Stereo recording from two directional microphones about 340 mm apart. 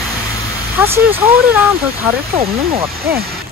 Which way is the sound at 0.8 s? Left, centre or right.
Centre.